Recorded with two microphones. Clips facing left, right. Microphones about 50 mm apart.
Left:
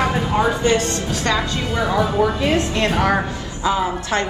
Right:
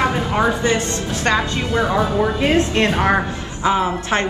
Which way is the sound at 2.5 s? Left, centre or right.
Right.